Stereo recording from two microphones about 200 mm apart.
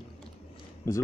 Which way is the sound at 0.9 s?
15° left (ahead or behind).